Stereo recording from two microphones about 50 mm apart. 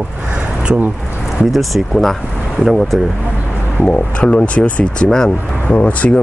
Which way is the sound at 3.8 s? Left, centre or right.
Left.